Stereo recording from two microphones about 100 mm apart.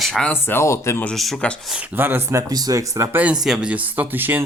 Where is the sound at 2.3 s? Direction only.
35° right (ahead or behind).